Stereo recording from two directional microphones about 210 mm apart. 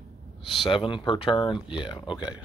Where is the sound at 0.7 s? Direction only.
25° left (ahead or behind).